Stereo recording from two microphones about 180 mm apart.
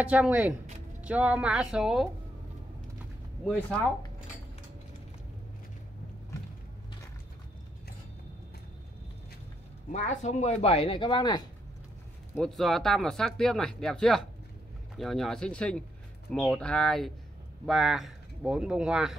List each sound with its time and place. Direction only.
0.0 s speech: 5° right (ahead or behind)
9.8 s speech: 40° left (ahead or behind); by 11.4 s 25° left (ahead or behind)
12.4 s speech: centre (ahead or behind)